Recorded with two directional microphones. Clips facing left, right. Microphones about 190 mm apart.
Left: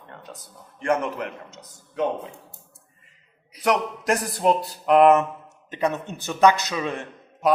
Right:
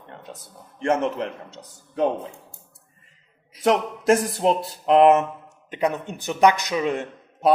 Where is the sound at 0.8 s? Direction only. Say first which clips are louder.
Right 2 dB; 25° right (ahead or behind).